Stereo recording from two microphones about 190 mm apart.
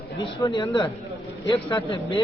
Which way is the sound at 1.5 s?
30° left (ahead or behind).